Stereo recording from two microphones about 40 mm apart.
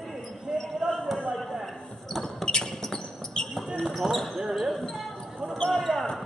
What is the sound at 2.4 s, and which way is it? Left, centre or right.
Basketball bounce, centre.